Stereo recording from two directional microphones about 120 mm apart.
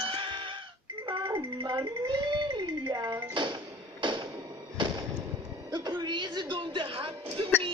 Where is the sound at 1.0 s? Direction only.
40° right (ahead or behind).